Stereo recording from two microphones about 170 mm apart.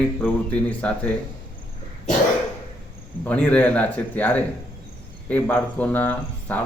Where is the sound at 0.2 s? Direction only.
5° left (ahead or behind).